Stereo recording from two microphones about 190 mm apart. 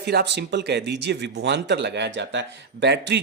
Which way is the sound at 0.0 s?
60° right (ahead or behind).